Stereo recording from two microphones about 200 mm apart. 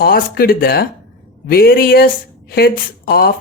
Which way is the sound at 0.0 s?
50° left (ahead or behind).